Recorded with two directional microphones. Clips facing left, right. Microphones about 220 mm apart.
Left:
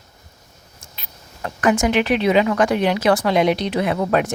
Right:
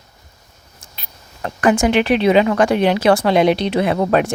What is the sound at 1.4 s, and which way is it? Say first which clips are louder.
Speech: right 3 dB; 30° right (ahead or behind).